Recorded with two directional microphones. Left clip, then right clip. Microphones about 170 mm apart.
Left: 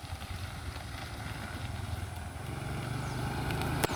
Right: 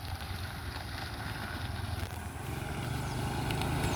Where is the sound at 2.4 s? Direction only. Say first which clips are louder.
Right 1 dB; 5° left (ahead or behind); by 3.8 s 10° right (ahead or behind).